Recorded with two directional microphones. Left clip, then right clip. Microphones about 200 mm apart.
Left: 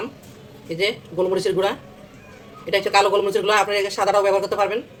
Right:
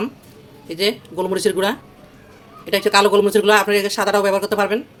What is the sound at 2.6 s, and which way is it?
Speech, 55° right (ahead or behind).